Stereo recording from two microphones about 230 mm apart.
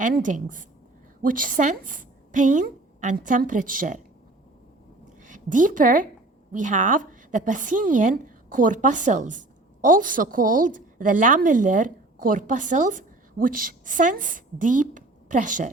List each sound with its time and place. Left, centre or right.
0.0 s a woman's voice: right
5.2 s a woman's voice: right